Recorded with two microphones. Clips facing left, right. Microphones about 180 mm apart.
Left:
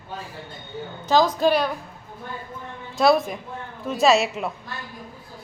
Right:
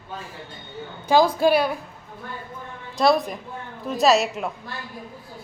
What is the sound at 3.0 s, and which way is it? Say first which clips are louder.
A woman's voice: left 1 dB; centre (ahead or behind).